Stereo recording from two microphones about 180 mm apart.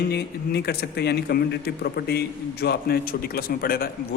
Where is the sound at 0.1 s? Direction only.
65° left (ahead or behind).